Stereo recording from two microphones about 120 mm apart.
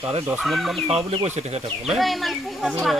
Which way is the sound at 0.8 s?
55° right (ahead or behind).